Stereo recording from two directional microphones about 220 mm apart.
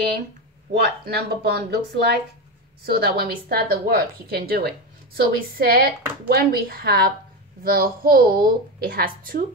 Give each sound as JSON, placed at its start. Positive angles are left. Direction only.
{"t": 0.7, "sound": "a woman's voice", "side_deg": -45}